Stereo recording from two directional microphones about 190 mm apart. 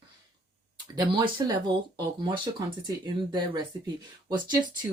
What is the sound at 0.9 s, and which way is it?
Speech, 20° right (ahead or behind).